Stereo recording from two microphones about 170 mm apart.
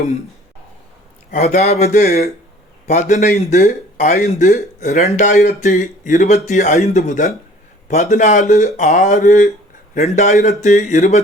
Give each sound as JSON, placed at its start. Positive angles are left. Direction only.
{"t": 1.3, "sound": "speech", "side_deg": 40}